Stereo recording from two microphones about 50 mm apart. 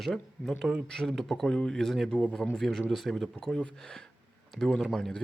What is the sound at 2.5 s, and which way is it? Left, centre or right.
Speech, centre.